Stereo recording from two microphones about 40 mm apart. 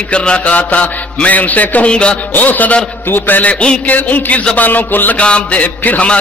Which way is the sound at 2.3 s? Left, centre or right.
Left.